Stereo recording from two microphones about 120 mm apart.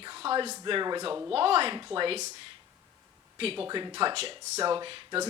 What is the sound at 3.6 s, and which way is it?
Speech, 40° right (ahead or behind).